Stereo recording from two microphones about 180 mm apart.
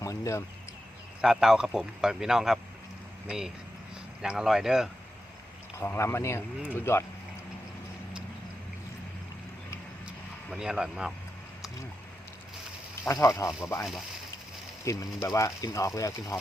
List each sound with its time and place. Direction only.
0.0 s a sound: 15° left (ahead or behind)
1.2 s speech: 5° right (ahead or behind)
5.7 s speech: 15° left (ahead or behind)
10.1 s a sound: 5° right (ahead or behind)
13.1 s speech: 15° left (ahead or behind)
14.8 s speech: 15° left (ahead or behind)